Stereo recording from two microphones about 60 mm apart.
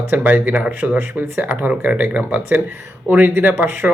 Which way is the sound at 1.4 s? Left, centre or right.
Right.